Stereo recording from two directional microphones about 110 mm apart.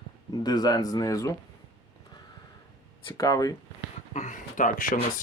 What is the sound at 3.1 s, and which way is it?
Speech, 35° left (ahead or behind).